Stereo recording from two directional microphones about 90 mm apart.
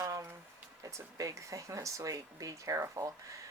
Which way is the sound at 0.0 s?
35° right (ahead or behind).